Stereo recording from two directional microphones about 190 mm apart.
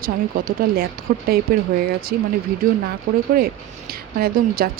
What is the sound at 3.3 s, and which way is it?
Speech, 50° right (ahead or behind).